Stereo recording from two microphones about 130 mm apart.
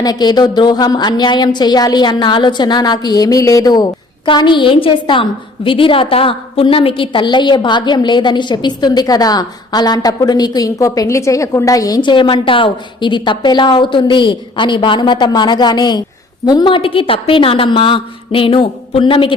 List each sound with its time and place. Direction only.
0.0 s a woman's voice: 30° left (ahead or behind)